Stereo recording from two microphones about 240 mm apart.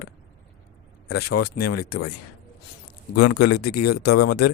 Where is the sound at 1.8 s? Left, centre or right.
Left.